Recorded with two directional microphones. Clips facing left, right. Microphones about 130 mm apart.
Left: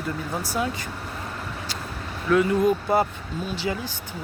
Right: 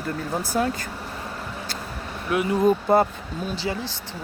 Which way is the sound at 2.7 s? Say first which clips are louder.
Right 3 dB; 40° right (ahead or behind).